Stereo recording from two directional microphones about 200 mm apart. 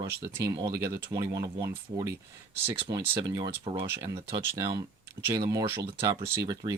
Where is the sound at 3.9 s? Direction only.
15° right (ahead or behind).